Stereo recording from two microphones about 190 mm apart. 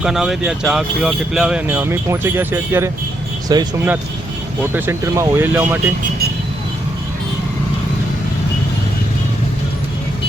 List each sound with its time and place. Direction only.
0.0 s speech: centre (ahead or behind); by 3.6 s 20° right (ahead or behind)
4.7 s speech: 15° right (ahead or behind)